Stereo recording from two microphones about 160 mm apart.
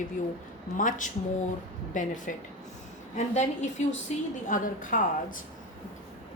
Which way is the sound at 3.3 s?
45° left (ahead or behind).